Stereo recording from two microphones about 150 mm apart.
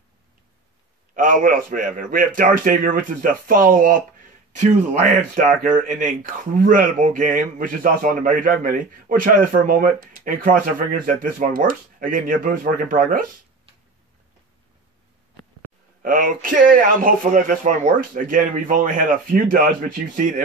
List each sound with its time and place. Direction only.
1.1 s speech: 65° right (ahead or behind)
4.5 s speech: 55° right (ahead or behind)
16.0 s speech: 65° right (ahead or behind)